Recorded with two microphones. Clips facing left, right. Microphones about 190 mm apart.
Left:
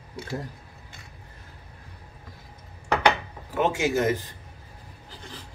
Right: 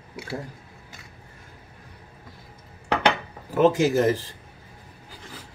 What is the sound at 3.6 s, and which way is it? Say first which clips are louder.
Speech: right 5 dB; 40° right (ahead or behind).